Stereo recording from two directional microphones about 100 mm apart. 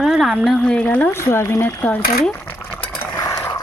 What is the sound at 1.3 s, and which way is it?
Speech, 25° left (ahead or behind).